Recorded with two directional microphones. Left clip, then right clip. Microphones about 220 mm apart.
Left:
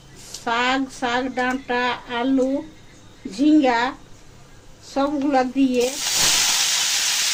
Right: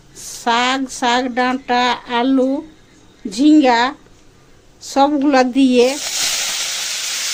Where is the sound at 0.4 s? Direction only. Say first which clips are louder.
Right 5 dB; 45° right (ahead or behind).